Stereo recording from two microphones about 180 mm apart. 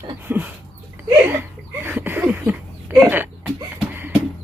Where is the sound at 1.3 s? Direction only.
10° right (ahead or behind).